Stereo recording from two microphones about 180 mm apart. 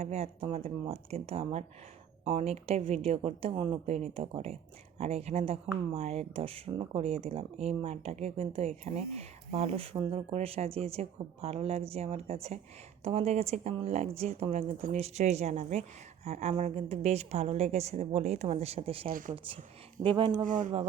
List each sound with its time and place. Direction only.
0.0 s speech: 35° right (ahead or behind)
20.4 s speech: 45° right (ahead or behind)